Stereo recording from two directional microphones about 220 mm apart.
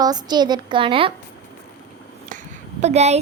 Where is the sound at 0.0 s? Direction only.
20° right (ahead or behind).